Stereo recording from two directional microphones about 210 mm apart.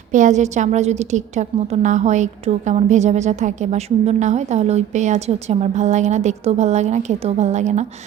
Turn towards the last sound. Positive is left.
turn(degrees=-35)  # may be behind; listen again after turning